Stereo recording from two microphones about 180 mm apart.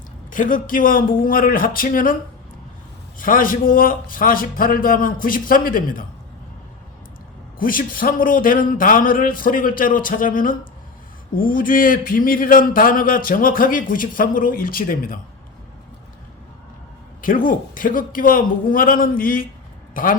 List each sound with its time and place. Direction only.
0.3 s speech: 50° left (ahead or behind)
3.2 s speech: 50° left (ahead or behind)
7.6 s speech: 50° left (ahead or behind)
17.2 s a man's voice: 50° left (ahead or behind)